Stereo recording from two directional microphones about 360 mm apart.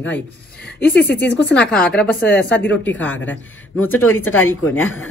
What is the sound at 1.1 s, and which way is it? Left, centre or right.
Speech, left.